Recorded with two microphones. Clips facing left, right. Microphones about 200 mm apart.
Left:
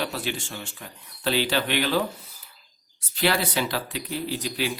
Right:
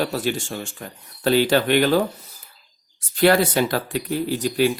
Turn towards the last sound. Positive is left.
turn(degrees=-50)  # may be behind; listen again after turning